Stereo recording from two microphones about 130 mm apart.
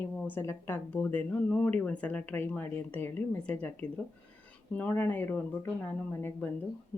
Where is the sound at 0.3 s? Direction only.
20° left (ahead or behind).